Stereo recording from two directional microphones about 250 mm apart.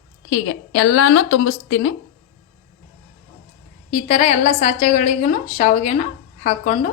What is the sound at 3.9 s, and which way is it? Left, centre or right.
A woman's voice, left.